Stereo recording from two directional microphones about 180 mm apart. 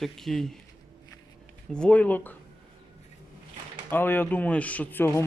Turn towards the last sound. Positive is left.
turn(degrees=10)  # may be behind; listen again after turning